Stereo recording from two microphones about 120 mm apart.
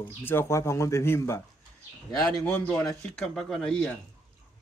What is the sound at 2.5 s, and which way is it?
Speech, 20° left (ahead or behind).